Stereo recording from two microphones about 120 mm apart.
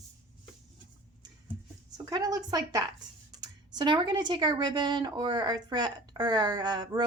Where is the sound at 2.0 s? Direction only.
30° right (ahead or behind).